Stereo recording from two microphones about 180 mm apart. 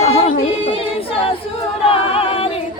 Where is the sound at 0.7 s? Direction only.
30° left (ahead or behind).